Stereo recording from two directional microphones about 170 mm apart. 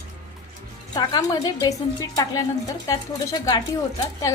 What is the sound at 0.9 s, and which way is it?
Speech, 20° left (ahead or behind).